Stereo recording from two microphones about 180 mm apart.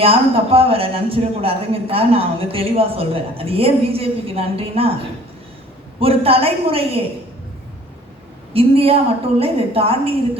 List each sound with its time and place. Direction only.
0.0 s a man's voice: 30° right (ahead or behind)
6.0 s a man's voice: 30° right (ahead or behind)
8.5 s a man's voice: 30° right (ahead or behind)